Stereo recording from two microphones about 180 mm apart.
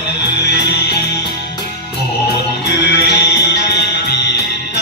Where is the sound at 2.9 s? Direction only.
70° left (ahead or behind).